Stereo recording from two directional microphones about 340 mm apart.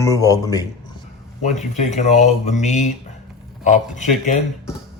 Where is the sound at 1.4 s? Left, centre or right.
Left.